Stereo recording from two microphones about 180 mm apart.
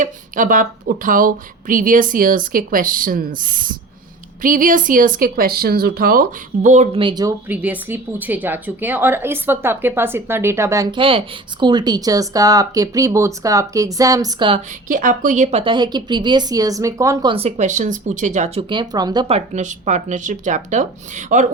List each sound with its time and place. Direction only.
0.0 s a woman's voice: 45° right (ahead or behind)
7.0 s speech: 25° right (ahead or behind)
7.4 s a woman's voice: 10° right (ahead or behind)
10.9 s speech: 30° right (ahead or behind)
14.8 s speech: 45° right (ahead or behind); by 17.3 s 20° right (ahead or behind)
17.3 s speech: 35° right (ahead or behind)
18.7 s speech: 25° right (ahead or behind)
19.5 s a woman's voice: 40° right (ahead or behind)